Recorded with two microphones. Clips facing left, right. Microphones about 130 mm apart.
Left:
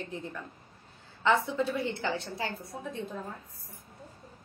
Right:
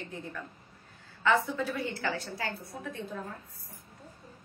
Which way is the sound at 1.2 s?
25° left (ahead or behind).